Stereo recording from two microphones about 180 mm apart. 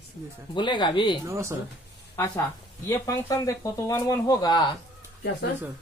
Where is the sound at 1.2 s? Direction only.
15° right (ahead or behind).